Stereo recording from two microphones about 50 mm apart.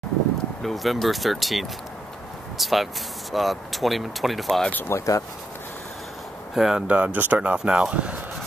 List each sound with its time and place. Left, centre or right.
0.6 s speech: centre
4.8 s speech: left
6.5 s speech: centre
6.9 s speech: right
7.5 s speech: centre